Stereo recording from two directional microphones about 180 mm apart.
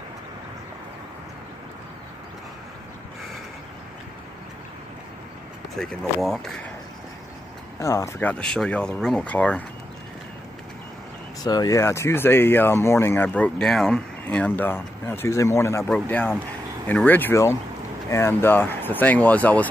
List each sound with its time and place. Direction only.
5.8 s speech: 5° left (ahead or behind)
7.8 s speech: 15° left (ahead or behind)
11.4 s speech: 20° left (ahead or behind)